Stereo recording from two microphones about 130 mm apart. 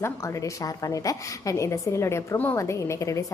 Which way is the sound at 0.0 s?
25° left (ahead or behind).